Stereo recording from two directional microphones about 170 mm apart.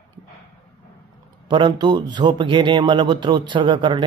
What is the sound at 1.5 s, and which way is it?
A man's voice, 25° right (ahead or behind).